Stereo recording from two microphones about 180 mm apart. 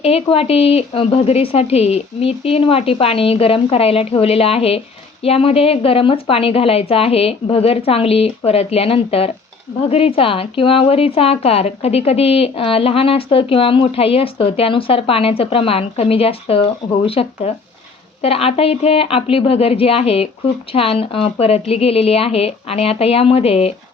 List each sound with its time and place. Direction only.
0.0 s speech: 30° left (ahead or behind)